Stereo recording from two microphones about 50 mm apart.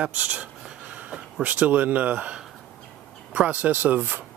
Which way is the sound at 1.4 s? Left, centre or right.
Right.